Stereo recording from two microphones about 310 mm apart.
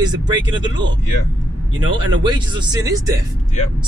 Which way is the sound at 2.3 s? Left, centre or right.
Centre.